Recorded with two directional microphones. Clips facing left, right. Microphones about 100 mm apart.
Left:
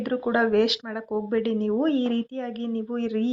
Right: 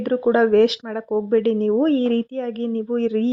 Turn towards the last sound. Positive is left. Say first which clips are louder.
# right 6 dB
turn(degrees=-35)  # may be behind; listen again after turning